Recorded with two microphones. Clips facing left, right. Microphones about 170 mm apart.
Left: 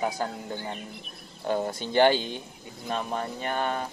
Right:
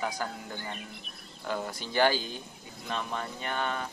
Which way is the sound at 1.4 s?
30° left (ahead or behind).